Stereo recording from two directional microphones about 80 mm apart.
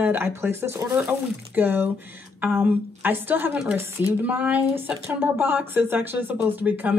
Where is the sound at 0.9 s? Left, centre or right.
Centre.